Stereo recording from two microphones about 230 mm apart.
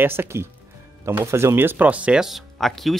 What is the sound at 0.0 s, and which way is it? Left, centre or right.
Speech, centre.